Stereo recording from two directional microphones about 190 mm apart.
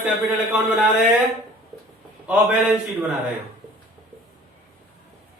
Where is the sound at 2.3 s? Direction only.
5° right (ahead or behind).